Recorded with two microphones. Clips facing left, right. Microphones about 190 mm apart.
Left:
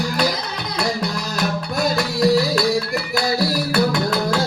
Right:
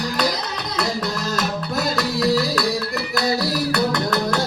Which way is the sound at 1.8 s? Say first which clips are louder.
Left 3 dB; centre (ahead or behind).